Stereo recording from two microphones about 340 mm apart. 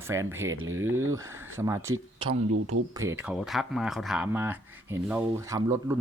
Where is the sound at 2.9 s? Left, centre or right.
Centre.